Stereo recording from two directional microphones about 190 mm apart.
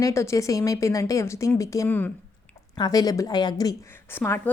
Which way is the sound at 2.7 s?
20° left (ahead or behind).